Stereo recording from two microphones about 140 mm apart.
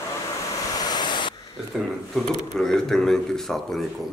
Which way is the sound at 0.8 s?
30° left (ahead or behind).